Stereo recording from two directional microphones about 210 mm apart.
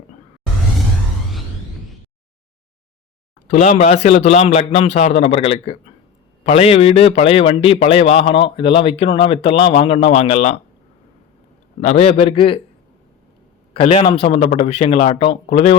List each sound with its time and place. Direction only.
3.5 s a man's voice: 35° left (ahead or behind)
11.8 s a man's voice: 35° left (ahead or behind)
13.7 s a man's voice: 25° left (ahead or behind)